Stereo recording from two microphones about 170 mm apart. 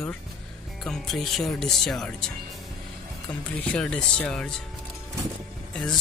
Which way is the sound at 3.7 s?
5° left (ahead or behind).